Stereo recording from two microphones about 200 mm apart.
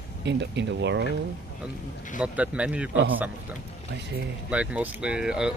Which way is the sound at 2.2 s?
5° right (ahead or behind).